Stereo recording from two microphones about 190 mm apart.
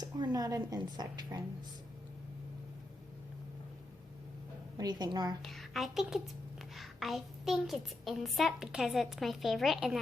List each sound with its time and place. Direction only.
0.0 s a woman's voice: 20° right (ahead or behind)
4.8 s a woman's voice: 20° right (ahead or behind)
5.4 s a woman's voice: centre (ahead or behind)